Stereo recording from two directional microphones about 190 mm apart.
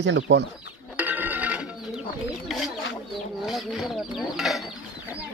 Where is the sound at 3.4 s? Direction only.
Centre (ahead or behind).